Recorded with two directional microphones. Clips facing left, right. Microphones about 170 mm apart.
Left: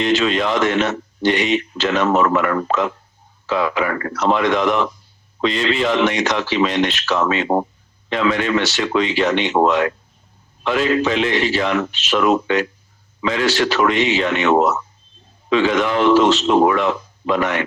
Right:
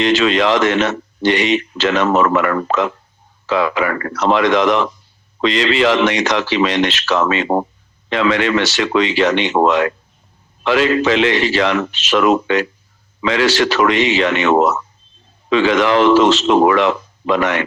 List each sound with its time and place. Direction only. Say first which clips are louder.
0.0 s a man's voice: right 3 dB; 90° right